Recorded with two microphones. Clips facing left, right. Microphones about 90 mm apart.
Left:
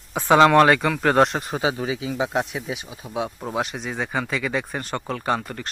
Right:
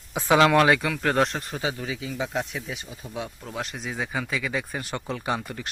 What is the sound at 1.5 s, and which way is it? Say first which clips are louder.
Speech: left 7 dB; 20° left (ahead or behind).